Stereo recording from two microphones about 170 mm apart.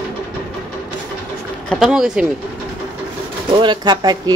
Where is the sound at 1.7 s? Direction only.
Centre (ahead or behind).